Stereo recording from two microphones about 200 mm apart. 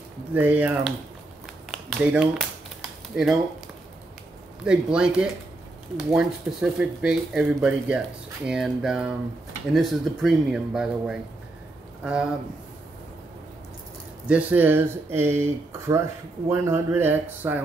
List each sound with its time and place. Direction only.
0.3 s speech: 10° right (ahead or behind)
1.7 s a sound: 5° right (ahead or behind)
4.6 s a man's voice: 5° right (ahead or behind)
14.2 s speech: 5° right (ahead or behind)